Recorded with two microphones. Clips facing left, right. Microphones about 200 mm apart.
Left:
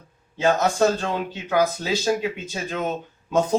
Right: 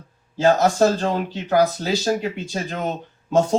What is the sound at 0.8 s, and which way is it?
Speech, 35° right (ahead or behind).